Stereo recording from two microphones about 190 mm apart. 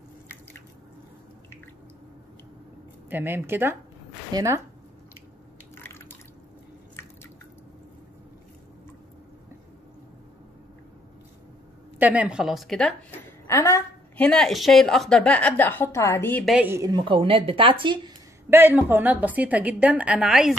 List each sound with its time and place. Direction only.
3.1 s a woman's voice: 10° right (ahead or behind)
5.9 s drip: 10° left (ahead or behind)
12.0 s a woman's voice: 5° right (ahead or behind)
13.5 s a woman's voice: 15° left (ahead or behind)
16.5 s a woman's voice: 10° right (ahead or behind)
18.5 s a woman's voice: 10° right (ahead or behind)